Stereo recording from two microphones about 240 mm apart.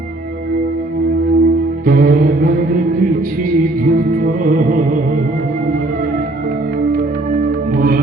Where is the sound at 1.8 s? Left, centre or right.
Right.